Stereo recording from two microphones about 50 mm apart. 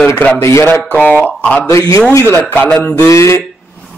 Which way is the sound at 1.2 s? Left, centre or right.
Left.